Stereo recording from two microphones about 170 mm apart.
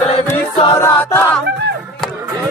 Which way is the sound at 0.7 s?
15° left (ahead or behind).